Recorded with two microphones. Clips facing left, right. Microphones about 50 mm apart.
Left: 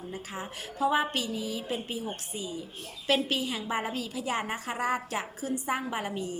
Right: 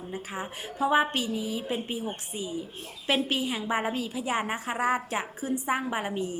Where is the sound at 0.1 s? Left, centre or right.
Right.